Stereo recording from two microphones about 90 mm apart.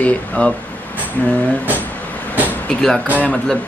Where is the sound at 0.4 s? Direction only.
15° left (ahead or behind).